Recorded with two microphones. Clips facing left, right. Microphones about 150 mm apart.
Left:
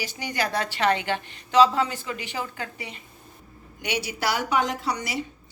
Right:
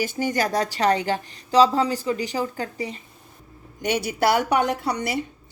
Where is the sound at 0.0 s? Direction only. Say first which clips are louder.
Right 6 dB; 45° right (ahead or behind).